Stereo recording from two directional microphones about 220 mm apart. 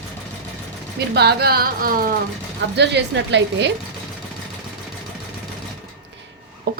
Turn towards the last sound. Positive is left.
turn(degrees=-45)  # may be behind; listen again after turning